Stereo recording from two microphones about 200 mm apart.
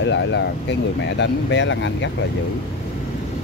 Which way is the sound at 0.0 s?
65° left (ahead or behind).